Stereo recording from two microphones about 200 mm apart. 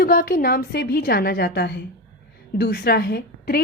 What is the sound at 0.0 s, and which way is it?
Speech, 50° left (ahead or behind).